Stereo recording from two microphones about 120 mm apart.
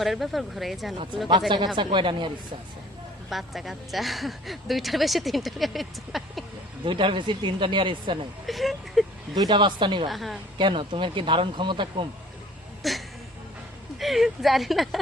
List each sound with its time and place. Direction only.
0.0 s a woman's voice: centre (ahead or behind)
1.5 s speech: 40° right (ahead or behind)
3.2 s a woman's voice: centre (ahead or behind)
6.8 s speech: 45° right (ahead or behind)
8.4 s a sound: centre (ahead or behind)
9.3 s speech: 35° right (ahead or behind)
10.1 s a woman's voice: centre (ahead or behind)
10.6 s speech: 45° right (ahead or behind)
12.8 s a sound: centre (ahead or behind)
14.0 s a woman's voice: centre (ahead or behind)